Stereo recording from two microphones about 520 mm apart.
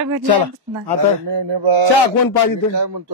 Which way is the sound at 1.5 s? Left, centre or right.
Right.